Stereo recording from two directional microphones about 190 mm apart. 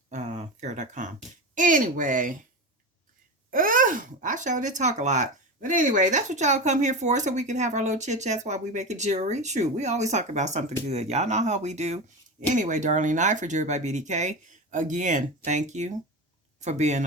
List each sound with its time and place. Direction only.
0.1 s a sound: 35° right (ahead or behind)
1.5 s speech: 45° right (ahead or behind)
3.5 s speech: 45° right (ahead or behind)